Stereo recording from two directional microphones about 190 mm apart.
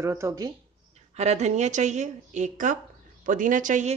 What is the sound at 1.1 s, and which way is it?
A woman's voice, 35° right (ahead or behind).